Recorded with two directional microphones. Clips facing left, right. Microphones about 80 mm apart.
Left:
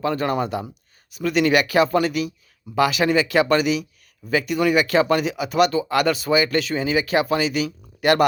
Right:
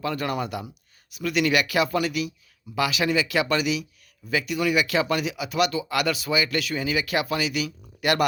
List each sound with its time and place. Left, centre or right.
0.0 s speech: left